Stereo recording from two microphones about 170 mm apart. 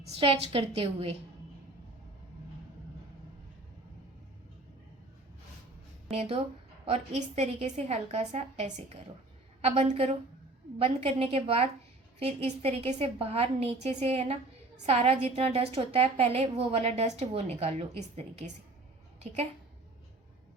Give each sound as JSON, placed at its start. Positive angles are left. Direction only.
{"t": 0.1, "sound": "a woman's voice", "side_deg": -35}
{"t": 6.1, "sound": "a woman's voice", "side_deg": -35}